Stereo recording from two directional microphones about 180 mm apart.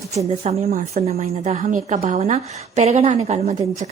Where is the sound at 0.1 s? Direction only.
35° right (ahead or behind).